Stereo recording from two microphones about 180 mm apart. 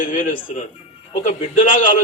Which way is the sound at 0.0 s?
45° left (ahead or behind).